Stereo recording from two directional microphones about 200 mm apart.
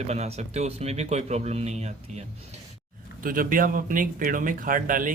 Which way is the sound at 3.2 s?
45° right (ahead or behind).